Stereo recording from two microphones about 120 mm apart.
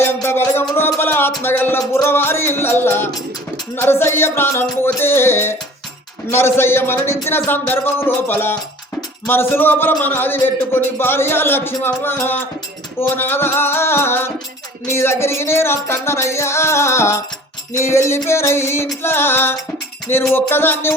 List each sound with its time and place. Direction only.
0.0 s music: 20° left (ahead or behind)
0.8 s a man's voice: 20° left (ahead or behind)
1.9 s music: 20° left (ahead or behind)
9.2 s a man's voice: 20° left (ahead or behind)
13.0 s music: 15° left (ahead or behind)
20.3 s a man's voice: 20° left (ahead or behind)